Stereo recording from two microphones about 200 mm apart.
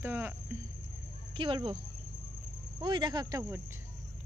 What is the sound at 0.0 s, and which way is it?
Cricket, 10° right (ahead or behind).